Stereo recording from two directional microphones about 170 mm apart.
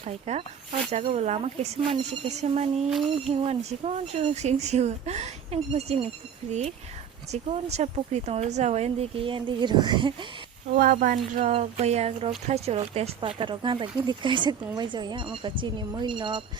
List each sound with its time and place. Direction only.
0.0 s speech: 35° right (ahead or behind)
10.8 s speech: 55° right (ahead or behind); by 16.4 s 30° right (ahead or behind)